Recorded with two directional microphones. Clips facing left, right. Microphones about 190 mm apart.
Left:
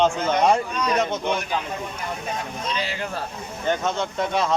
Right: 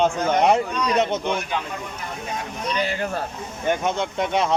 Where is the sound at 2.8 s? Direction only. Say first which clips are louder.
Right 4 dB; 55° right (ahead or behind).